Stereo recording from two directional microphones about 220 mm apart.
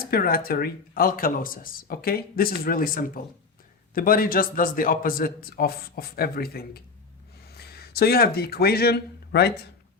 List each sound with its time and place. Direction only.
0.0 s speech: 45° left (ahead or behind)